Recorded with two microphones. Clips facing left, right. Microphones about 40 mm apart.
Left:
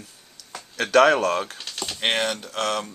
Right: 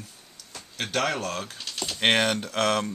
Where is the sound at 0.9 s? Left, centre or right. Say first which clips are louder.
Left 11 dB; left.